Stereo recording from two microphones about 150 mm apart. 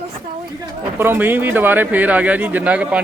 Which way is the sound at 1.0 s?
15° right (ahead or behind).